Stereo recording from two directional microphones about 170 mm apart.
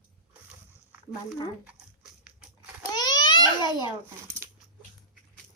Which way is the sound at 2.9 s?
25° left (ahead or behind).